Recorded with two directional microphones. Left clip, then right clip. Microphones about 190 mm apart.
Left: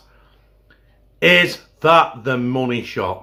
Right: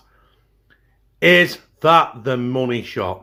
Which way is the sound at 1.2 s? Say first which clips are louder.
Even; 30° right (ahead or behind).